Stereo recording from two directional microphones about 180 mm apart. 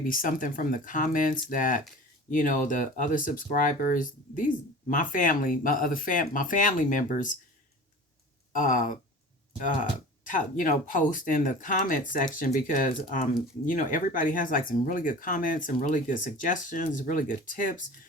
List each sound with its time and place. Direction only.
0.0 s speech: 50° left (ahead or behind)
8.5 s speech: 45° left (ahead or behind)
10.2 s speech: 50° left (ahead or behind)